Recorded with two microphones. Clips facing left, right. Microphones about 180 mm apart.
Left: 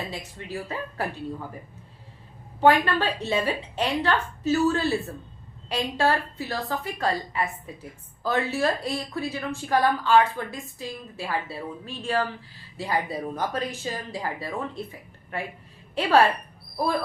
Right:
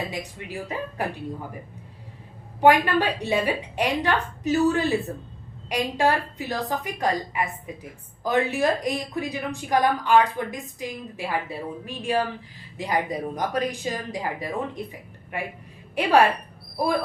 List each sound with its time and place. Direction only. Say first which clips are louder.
0.1 s a woman's voice: right 1 dB; 15° right (ahead or behind)
2.6 s a woman's voice: right 2 dB; 15° right (ahead or behind)